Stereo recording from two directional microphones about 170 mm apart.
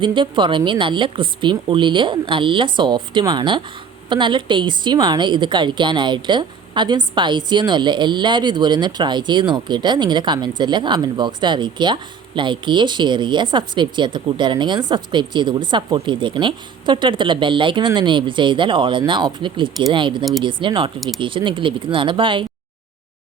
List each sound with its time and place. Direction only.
0.0 s a woman's voice: 30° right (ahead or behind)